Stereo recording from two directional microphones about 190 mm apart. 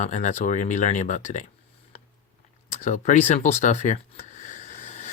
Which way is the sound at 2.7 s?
40° left (ahead or behind).